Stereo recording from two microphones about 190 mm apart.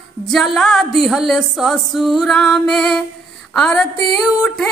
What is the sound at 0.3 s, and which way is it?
Music, centre (ahead or behind).